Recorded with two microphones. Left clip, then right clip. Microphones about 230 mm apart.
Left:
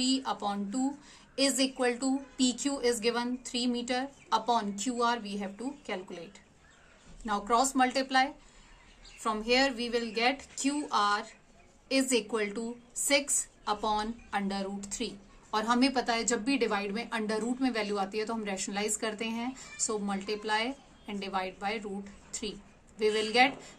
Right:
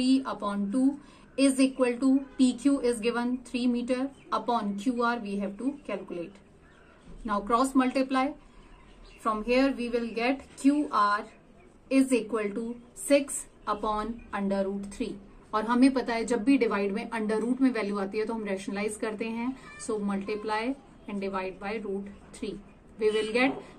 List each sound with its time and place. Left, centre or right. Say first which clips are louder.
0.0 s speech: right 3 dB; left
7.2 s speech: right 1 dB; left
9.2 s speech: right 2 dB; left
13.7 s speech: right 1 dB; left
22.9 s speech: even; left